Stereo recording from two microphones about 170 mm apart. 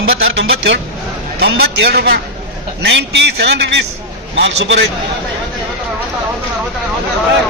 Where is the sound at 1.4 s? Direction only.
75° right (ahead or behind).